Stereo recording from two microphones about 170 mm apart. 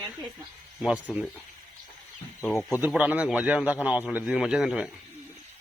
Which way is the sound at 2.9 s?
10° right (ahead or behind).